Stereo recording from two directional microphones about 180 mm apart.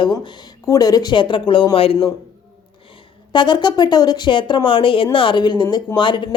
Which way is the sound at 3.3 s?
25° left (ahead or behind).